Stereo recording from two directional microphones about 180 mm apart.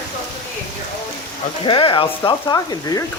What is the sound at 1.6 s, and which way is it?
Speech, 25° left (ahead or behind).